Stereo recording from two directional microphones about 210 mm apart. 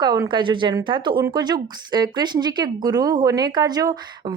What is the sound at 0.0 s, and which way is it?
Speech, 20° right (ahead or behind).